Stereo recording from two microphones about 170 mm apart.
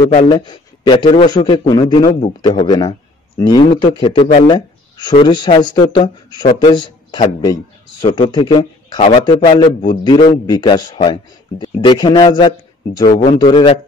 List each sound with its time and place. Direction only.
0.3 s speech: 25° left (ahead or behind)